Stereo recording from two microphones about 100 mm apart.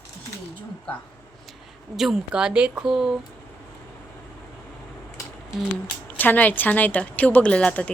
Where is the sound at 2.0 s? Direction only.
5° right (ahead or behind).